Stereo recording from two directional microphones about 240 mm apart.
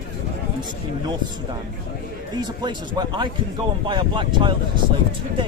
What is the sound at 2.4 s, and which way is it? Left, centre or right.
Speech, centre.